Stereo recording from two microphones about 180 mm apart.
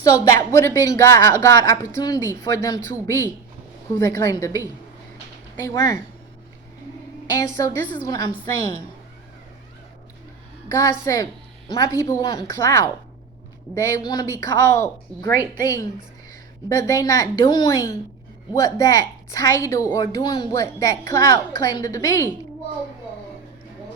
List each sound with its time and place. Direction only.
0.0 s a woman's voice: 20° left (ahead or behind)
7.3 s a woman's voice: 20° left (ahead or behind)
10.7 s a woman's voice: 15° left (ahead or behind)